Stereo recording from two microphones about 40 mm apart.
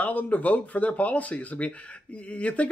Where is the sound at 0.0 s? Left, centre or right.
Left.